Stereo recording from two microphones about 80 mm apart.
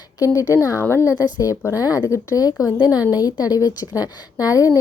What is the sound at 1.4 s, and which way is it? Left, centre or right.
A woman's voice, left.